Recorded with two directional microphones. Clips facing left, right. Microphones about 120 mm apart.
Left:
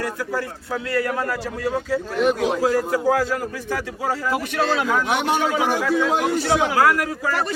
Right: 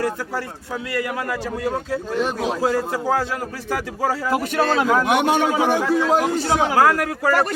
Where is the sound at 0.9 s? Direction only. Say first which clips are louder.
Left 2 dB; 20° right (ahead or behind).